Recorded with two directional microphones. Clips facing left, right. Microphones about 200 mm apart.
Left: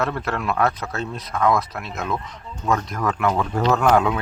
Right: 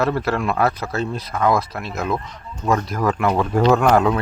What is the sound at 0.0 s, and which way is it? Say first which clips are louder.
Speech: right 4 dB; 5° right (ahead or behind).